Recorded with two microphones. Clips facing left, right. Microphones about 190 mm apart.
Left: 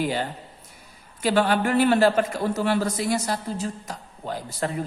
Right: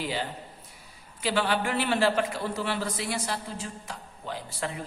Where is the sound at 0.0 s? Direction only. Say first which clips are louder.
Left 6 dB; 50° left (ahead or behind).